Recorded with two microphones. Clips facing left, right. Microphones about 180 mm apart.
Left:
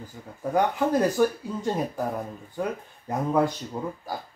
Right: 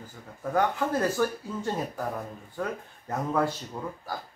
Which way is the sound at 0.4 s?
15° left (ahead or behind).